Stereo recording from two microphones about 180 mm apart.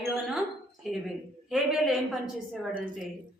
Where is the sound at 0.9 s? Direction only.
5° right (ahead or behind).